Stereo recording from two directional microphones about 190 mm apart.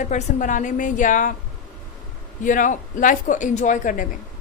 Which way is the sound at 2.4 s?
45° left (ahead or behind).